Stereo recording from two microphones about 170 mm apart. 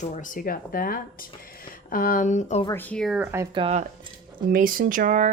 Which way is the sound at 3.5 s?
30° right (ahead or behind).